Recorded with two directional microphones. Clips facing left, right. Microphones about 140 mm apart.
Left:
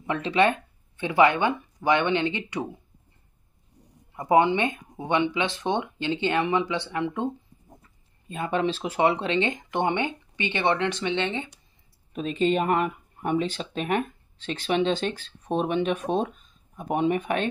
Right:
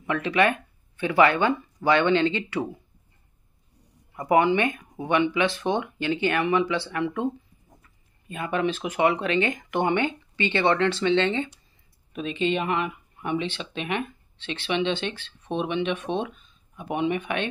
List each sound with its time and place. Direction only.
0.0 s speech: 25° left (ahead or behind)
4.2 s speech: 25° left (ahead or behind)
8.3 s speech: 30° left (ahead or behind); by 11.5 s 15° left (ahead or behind)
12.1 s speech: 40° left (ahead or behind)